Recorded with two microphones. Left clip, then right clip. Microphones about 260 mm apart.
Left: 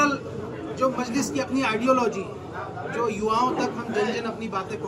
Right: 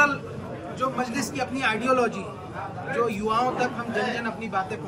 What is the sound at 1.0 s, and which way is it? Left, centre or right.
A man's voice, centre.